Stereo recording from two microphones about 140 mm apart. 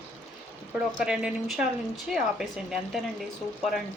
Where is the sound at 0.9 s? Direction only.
5° right (ahead or behind).